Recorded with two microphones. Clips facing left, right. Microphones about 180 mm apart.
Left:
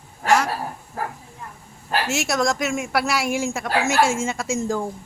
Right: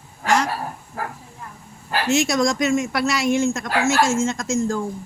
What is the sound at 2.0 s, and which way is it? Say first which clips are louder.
Speech: right 5 dB; 5° left (ahead or behind).